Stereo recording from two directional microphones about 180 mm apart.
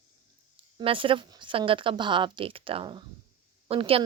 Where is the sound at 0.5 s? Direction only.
30° right (ahead or behind).